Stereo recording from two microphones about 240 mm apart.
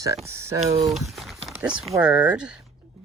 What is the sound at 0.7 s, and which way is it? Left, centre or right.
Speech, right.